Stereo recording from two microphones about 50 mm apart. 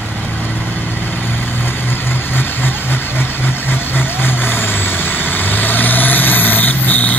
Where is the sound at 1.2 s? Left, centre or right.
Left.